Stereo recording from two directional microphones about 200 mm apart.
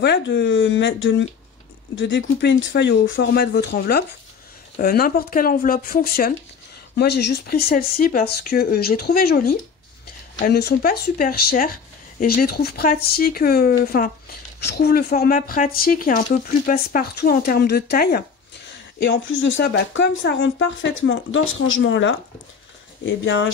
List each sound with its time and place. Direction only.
0.0 s speech: 60° left (ahead or behind)
19.0 s speech: 70° left (ahead or behind)